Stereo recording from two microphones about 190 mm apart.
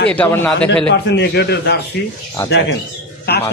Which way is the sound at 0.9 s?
65° left (ahead or behind).